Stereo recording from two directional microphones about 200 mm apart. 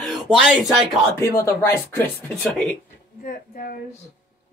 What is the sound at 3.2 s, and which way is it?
Speech, 45° left (ahead or behind).